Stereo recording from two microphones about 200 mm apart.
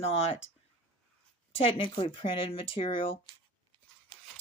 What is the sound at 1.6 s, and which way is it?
Speech, 25° left (ahead or behind).